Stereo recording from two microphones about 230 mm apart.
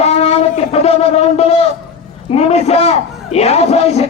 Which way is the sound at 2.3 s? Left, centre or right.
Left.